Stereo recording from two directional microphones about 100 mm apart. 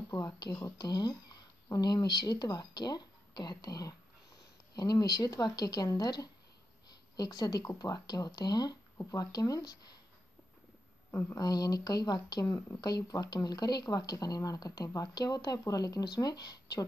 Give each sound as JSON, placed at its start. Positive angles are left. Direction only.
{"t": 0.1, "sound": "speech", "side_deg": 40}
{"t": 11.1, "sound": "speech", "side_deg": 25}
{"t": 11.3, "sound": "speech", "side_deg": 40}